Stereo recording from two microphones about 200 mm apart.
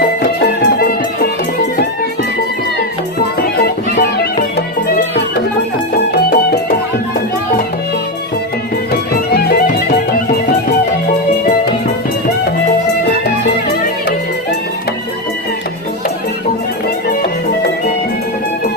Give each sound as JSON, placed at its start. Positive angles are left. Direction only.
{"t": 0.2, "sound": "music", "side_deg": 50}
{"t": 3.2, "sound": "music", "side_deg": 50}
{"t": 6.1, "sound": "music", "side_deg": 50}
{"t": 9.3, "sound": "music", "side_deg": 50}